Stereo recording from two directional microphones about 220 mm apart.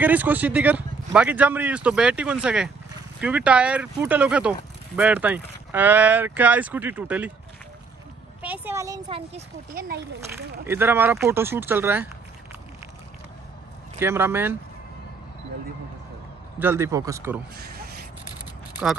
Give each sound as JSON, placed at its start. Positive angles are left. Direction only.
{"t": 0.0, "sound": "speech", "side_deg": -5}
{"t": 8.4, "sound": "speech", "side_deg": -10}
{"t": 10.7, "sound": "speech", "side_deg": -10}
{"t": 13.9, "sound": "speech", "side_deg": -10}
{"t": 16.5, "sound": "speech", "side_deg": -10}
{"t": 17.6, "sound": "a sound", "side_deg": -45}